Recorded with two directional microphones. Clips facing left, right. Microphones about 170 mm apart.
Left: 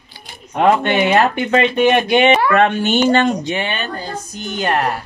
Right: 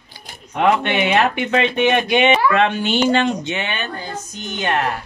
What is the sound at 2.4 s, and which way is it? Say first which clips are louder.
Speech: left 2 dB; 50° left (ahead or behind).